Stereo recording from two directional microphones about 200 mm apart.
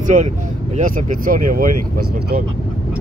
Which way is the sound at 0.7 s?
40° right (ahead or behind).